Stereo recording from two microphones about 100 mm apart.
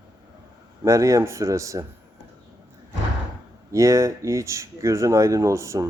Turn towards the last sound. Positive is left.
turn(degrees=-30)  # may be behind; listen again after turning